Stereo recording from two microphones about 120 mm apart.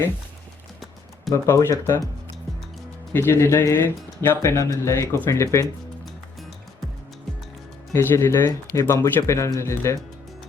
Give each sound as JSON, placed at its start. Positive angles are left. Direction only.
{"t": 1.3, "sound": "speech", "side_deg": 30}
{"t": 3.1, "sound": "speech", "side_deg": 20}
{"t": 7.9, "sound": "speech", "side_deg": 20}